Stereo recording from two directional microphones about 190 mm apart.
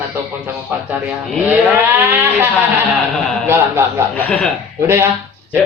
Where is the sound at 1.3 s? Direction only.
Centre (ahead or behind).